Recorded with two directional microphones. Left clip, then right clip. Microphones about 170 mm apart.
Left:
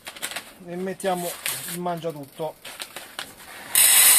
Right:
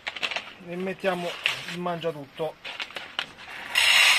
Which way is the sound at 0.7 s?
20° right (ahead or behind).